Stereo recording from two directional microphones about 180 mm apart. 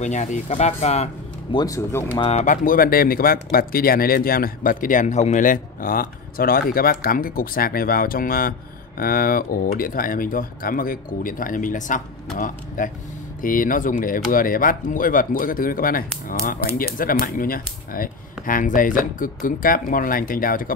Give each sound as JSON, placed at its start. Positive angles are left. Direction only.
{"t": 0.0, "sound": "speech", "side_deg": 40}
{"t": 1.5, "sound": "speech", "side_deg": 20}
{"t": 2.1, "sound": "speech", "side_deg": 35}